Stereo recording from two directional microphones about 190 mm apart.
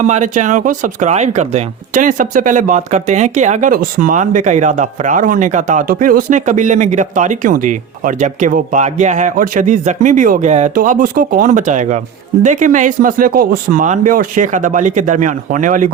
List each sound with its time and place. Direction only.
0.0 s speech: 40° right (ahead or behind)